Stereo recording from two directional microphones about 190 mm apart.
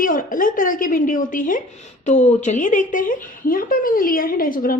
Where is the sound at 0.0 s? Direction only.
45° left (ahead or behind).